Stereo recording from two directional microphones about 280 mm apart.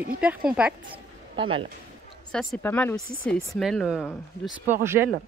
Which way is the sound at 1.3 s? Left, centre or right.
Centre.